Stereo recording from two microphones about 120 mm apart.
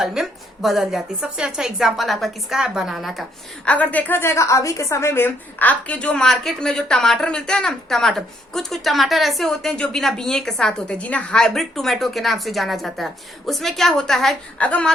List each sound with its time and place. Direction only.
0.0 s a woman's voice: 5° right (ahead or behind)
3.7 s a woman's voice: 10° left (ahead or behind)